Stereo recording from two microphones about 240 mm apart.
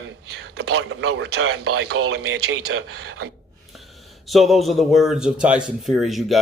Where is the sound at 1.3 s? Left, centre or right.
Right.